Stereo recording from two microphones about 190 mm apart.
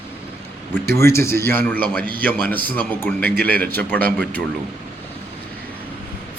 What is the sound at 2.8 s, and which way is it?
Speech, 10° left (ahead or behind).